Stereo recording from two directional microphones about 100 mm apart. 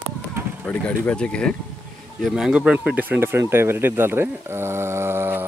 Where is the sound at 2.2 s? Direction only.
5° right (ahead or behind).